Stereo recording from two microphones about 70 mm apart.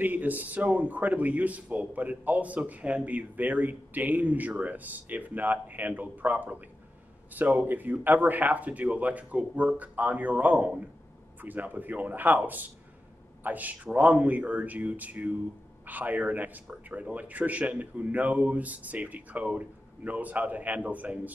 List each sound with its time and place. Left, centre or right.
0.0 s a man's voice: right